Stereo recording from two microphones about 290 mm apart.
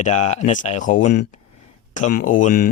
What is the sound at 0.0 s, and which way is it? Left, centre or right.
Speech, left.